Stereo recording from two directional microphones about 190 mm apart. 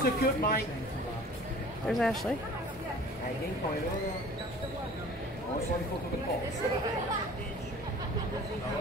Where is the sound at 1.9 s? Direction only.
Centre (ahead or behind).